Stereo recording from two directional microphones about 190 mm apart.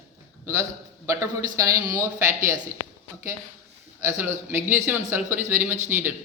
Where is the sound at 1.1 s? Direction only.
15° right (ahead or behind).